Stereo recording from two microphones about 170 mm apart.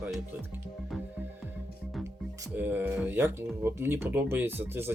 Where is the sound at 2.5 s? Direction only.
10° right (ahead or behind).